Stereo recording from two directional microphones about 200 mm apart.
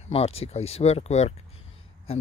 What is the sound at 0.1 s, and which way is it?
Speech, 30° left (ahead or behind).